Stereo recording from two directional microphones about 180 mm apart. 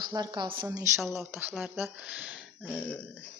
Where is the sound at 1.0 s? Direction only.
Centre (ahead or behind).